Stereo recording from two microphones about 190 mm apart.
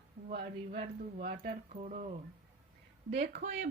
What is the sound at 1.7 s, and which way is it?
Speech, 40° right (ahead or behind).